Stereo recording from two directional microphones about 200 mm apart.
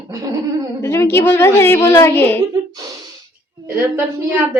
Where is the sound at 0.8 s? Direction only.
10° left (ahead or behind).